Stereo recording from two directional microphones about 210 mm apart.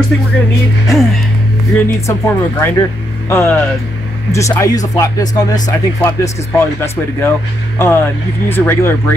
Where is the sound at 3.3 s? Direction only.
10° left (ahead or behind).